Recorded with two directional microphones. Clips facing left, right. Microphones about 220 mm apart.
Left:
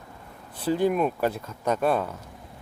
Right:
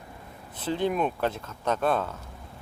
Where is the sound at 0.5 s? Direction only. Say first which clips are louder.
Left 4 dB; 10° left (ahead or behind).